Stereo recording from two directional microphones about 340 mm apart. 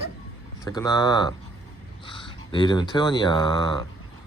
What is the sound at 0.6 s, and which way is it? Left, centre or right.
Speech, centre.